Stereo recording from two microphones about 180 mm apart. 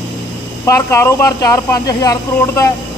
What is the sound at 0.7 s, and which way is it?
Speech, 15° left (ahead or behind).